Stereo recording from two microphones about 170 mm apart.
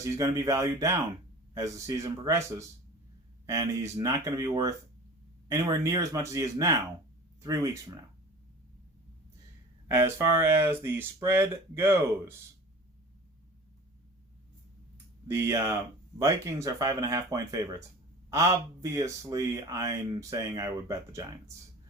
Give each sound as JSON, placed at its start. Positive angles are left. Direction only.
{"t": 0.0, "sound": "speech", "side_deg": -20}
{"t": 9.9, "sound": "speech", "side_deg": -15}
{"t": 15.3, "sound": "speech", "side_deg": -15}